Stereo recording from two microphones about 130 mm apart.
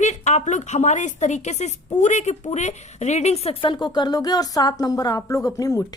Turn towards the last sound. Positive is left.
turn(degrees=25)  # may be behind; listen again after turning